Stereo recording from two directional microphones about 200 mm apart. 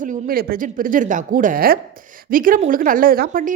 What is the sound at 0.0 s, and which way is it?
Speech, 45° right (ahead or behind).